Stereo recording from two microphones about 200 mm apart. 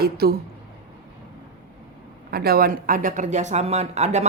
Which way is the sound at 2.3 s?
50° right (ahead or behind).